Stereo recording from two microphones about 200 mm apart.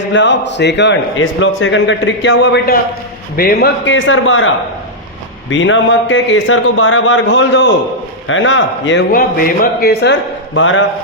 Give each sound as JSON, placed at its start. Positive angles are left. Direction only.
{"t": 0.1, "sound": "a man's voice", "side_deg": 65}
{"t": 3.3, "sound": "a man's voice", "side_deg": 50}
{"t": 3.8, "sound": "a man's voice", "side_deg": 70}